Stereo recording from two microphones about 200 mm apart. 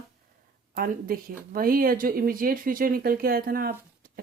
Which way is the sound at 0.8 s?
45° right (ahead or behind).